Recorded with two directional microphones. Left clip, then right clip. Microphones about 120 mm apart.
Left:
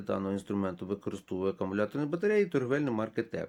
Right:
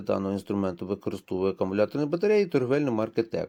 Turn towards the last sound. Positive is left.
turn(degrees=-50)  # may be behind; listen again after turning